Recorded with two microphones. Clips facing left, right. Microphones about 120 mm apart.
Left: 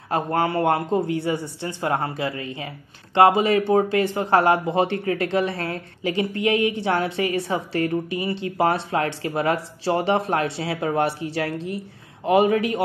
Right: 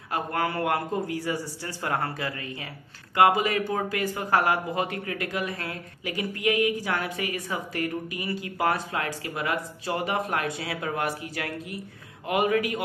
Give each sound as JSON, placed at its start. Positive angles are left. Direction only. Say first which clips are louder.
{"t": 0.1, "sound": "speech", "louder": "left 6 dB", "side_deg": 30}